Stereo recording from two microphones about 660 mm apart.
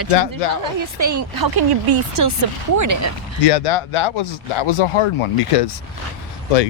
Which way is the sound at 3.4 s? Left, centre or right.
Left.